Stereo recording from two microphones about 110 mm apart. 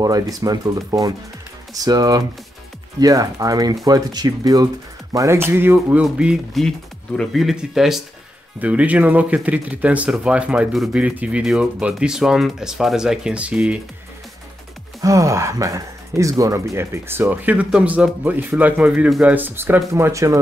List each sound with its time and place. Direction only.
0.0 s speech: 35° right (ahead or behind); by 6.0 s 20° right (ahead or behind)
6.0 s speech: 10° right (ahead or behind)
15.0 s speech: 30° right (ahead or behind)